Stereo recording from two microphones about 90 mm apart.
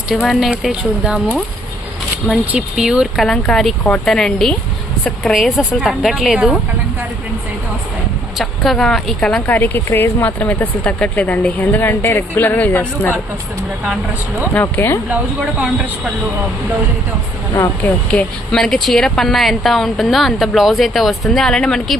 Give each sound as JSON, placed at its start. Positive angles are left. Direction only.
{"t": 0.3, "sound": "speech", "side_deg": 0}
{"t": 2.5, "sound": "speech", "side_deg": -10}
{"t": 3.2, "sound": "speech", "side_deg": 5}
{"t": 8.4, "sound": "speech", "side_deg": 0}
{"t": 9.5, "sound": "speech", "side_deg": 20}
{"t": 14.5, "sound": "speech", "side_deg": 25}
{"t": 15.1, "sound": "speech", "side_deg": -15}
{"t": 17.8, "sound": "speech", "side_deg": 15}
{"t": 18.5, "sound": "speech", "side_deg": 5}